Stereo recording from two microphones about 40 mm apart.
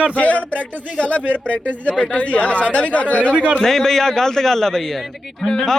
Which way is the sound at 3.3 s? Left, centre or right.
Right.